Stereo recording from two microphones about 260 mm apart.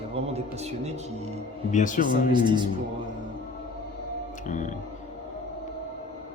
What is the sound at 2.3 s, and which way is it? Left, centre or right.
Speech, centre.